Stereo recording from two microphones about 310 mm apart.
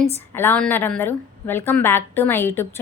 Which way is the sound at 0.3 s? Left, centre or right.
Centre.